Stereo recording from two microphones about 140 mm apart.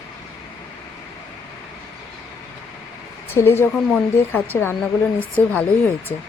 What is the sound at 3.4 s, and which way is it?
Speech, 15° left (ahead or behind).